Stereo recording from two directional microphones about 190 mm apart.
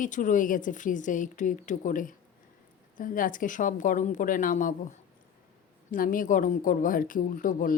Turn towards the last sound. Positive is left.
turn(degrees=45)  # may be behind; listen again after turning